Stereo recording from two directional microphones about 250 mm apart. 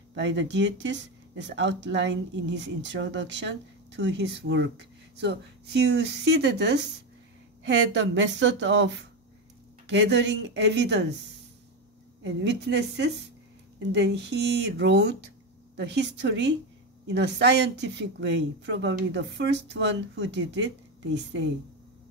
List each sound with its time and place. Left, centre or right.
0.1 s speech: right
12.2 s speech: right